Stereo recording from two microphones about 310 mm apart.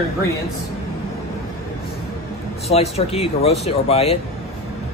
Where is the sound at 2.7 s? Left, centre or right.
Centre.